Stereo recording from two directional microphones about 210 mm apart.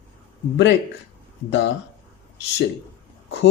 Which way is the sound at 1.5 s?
60° left (ahead or behind).